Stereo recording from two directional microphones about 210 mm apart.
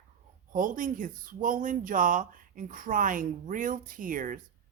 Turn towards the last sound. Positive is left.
turn(degrees=-40)  # may be behind; listen again after turning